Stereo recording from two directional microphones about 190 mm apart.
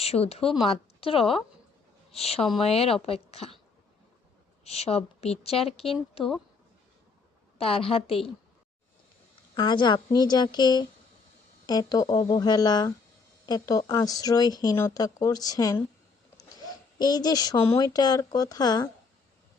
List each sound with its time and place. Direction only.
0.0 s a woman's voice: 35° left (ahead or behind)
4.6 s a woman's voice: 35° left (ahead or behind)
7.6 s speech: 30° left (ahead or behind)
9.6 s speech: 25° left (ahead or behind)